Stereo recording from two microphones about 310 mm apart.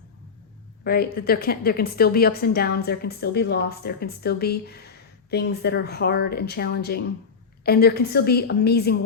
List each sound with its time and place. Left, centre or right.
0.9 s a woman's voice: left